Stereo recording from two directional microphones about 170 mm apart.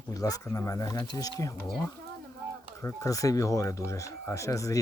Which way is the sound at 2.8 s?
20° left (ahead or behind).